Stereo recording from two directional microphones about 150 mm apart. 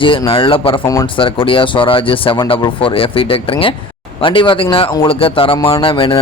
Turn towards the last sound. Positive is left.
turn(degrees=35)  # may be behind; listen again after turning